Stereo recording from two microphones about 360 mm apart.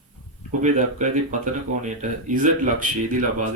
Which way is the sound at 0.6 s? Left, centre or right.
Right.